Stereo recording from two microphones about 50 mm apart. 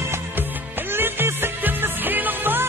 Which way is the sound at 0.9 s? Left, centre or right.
Right.